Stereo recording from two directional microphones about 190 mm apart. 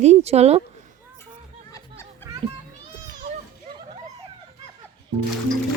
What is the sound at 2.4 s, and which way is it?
Speech, 30° right (ahead or behind).